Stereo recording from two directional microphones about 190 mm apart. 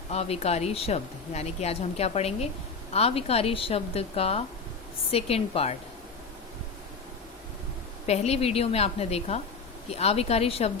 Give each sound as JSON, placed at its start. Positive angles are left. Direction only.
{"t": 0.1, "sound": "speech", "side_deg": 35}
{"t": 8.0, "sound": "speech", "side_deg": 35}